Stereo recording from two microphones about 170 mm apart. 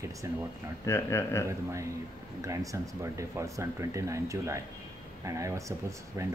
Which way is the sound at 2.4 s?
20° right (ahead or behind).